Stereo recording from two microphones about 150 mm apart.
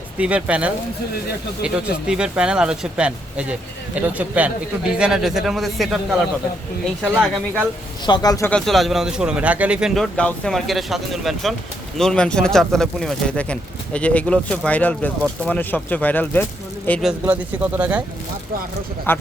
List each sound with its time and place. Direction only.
0.2 s speech: 10° right (ahead or behind)
8.0 s speech: 25° left (ahead or behind)
8.4 s speech: 5° left (ahead or behind)
17.0 s speech: 5° right (ahead or behind)
19.1 s speech: 15° left (ahead or behind)